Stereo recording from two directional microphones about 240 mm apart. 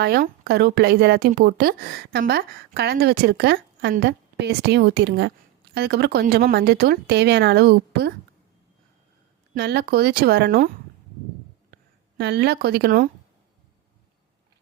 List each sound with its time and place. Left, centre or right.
0.0 s a woman's voice: right
9.6 s speech: right
11.7 s speech: right